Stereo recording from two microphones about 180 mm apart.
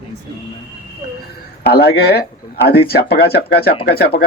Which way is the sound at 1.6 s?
60° left (ahead or behind).